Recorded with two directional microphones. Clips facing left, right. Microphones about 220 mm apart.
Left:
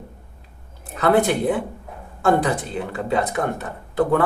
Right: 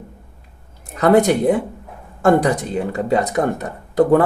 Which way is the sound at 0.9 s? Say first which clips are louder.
Right 4 dB; 40° right (ahead or behind).